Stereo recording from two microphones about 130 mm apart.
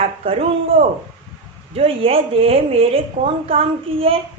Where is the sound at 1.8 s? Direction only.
45° right (ahead or behind).